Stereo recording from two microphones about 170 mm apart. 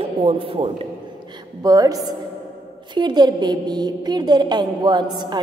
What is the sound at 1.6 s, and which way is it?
A woman's voice, 20° right (ahead or behind).